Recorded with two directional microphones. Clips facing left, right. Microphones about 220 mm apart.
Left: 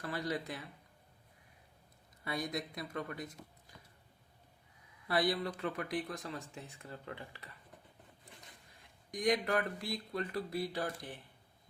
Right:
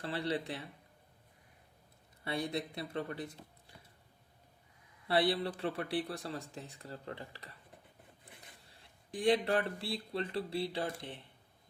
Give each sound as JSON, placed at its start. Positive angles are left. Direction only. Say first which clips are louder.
{"t": 0.0, "sound": "speech", "louder": "right 2 dB", "side_deg": -30}
{"t": 2.2, "sound": "speech", "louder": "right 2 dB", "side_deg": -30}
{"t": 5.0, "sound": "speech", "louder": "right 2 dB", "side_deg": -30}
{"t": 8.7, "sound": "speech", "louder": "right 1 dB", "side_deg": -30}